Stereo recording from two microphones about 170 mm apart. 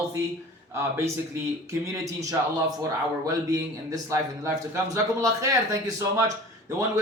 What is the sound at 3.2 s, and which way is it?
A man's voice, 20° right (ahead or behind).